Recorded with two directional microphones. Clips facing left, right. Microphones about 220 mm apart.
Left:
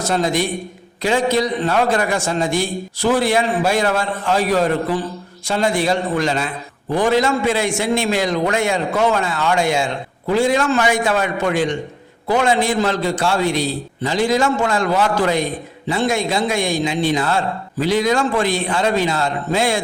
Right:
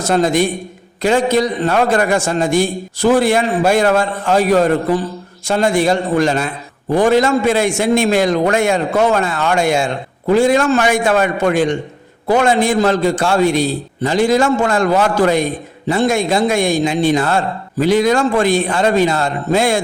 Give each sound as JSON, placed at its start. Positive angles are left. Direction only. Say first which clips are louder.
{"t": 0.1, "sound": "a man's voice", "louder": "right 6 dB", "side_deg": -50}